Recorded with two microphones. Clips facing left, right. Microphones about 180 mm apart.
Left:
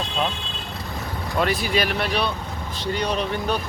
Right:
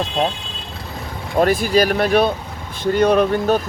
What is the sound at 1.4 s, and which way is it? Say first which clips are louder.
Speech: right 7 dB; 45° right (ahead or behind).